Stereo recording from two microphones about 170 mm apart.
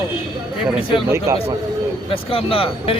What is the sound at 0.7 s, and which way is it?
Speech, 30° left (ahead or behind).